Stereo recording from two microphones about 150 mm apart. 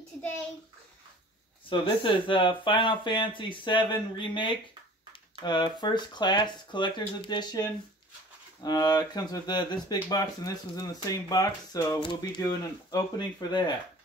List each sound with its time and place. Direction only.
1.7 s speech: 35° left (ahead or behind)
8.6 s speech: 25° left (ahead or behind)